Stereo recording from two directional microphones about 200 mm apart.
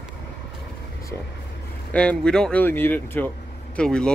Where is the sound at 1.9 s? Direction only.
5° left (ahead or behind).